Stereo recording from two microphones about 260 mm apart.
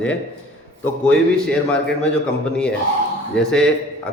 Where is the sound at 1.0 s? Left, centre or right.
Centre.